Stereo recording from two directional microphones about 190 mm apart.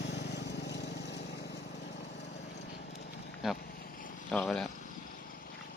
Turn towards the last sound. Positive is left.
turn(degrees=0)  # may be behind; listen again after turning